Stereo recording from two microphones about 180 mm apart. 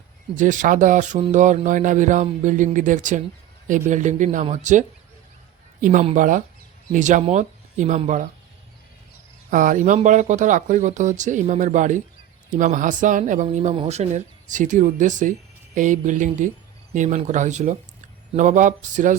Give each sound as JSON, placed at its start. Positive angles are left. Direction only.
{"t": 0.3, "sound": "speech", "side_deg": -45}
{"t": 9.5, "sound": "speech", "side_deg": -45}